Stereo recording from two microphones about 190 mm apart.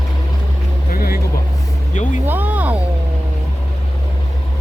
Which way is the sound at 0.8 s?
50° left (ahead or behind).